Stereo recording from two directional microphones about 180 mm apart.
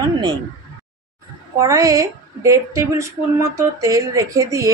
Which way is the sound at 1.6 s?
20° right (ahead or behind).